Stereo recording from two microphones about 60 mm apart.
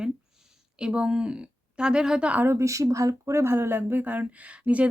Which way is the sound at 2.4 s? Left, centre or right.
Right.